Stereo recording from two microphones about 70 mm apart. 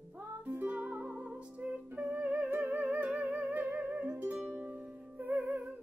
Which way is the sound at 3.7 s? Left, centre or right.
Right.